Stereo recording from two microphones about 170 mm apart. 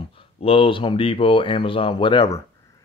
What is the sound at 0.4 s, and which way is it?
Speech, 35° left (ahead or behind).